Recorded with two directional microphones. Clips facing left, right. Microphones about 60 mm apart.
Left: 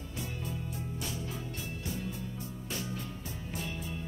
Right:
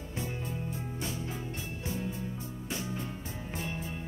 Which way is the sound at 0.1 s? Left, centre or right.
Right.